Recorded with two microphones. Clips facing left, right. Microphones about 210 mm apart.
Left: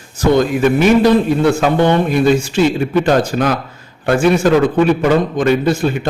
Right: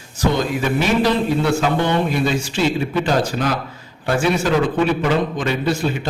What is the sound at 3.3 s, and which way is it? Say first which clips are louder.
A man's voice: left 5 dB; 50° left (ahead or behind).